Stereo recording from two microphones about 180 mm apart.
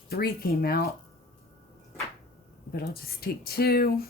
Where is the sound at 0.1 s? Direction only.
60° left (ahead or behind).